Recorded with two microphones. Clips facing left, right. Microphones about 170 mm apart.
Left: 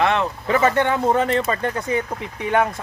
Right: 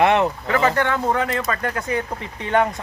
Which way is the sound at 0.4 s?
20° left (ahead or behind).